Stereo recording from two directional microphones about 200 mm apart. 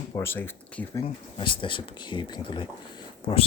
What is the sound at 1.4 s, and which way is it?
Speech, 25° left (ahead or behind).